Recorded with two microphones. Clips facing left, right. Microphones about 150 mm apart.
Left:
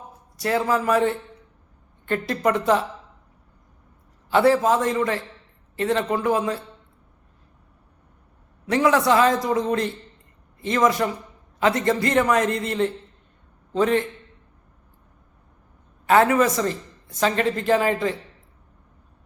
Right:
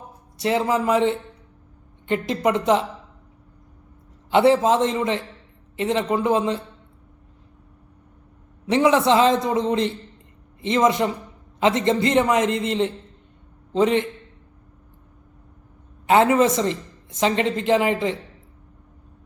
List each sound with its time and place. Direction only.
0.3 s a woman's voice: 20° right (ahead or behind)
4.3 s a woman's voice: 20° right (ahead or behind)
8.6 s a woman's voice: 20° right (ahead or behind)
16.0 s a woman's voice: 20° right (ahead or behind)